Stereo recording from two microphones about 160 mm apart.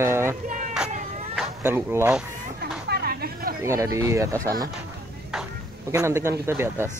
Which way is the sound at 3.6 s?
20° right (ahead or behind).